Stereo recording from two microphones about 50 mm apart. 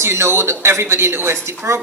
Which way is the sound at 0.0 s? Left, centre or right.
Right.